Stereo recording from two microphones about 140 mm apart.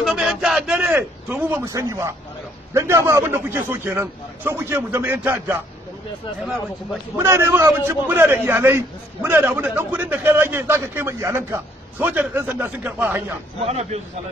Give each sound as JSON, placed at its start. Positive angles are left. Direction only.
{"t": 0.0, "sound": "a sound", "side_deg": 0}
{"t": 1.7, "sound": "a man's voice", "side_deg": -20}
{"t": 7.2, "sound": "a man's voice", "side_deg": -20}
{"t": 13.6, "sound": "a man's voice", "side_deg": -50}